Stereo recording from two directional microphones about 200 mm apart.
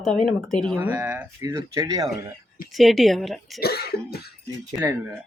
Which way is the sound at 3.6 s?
50° left (ahead or behind).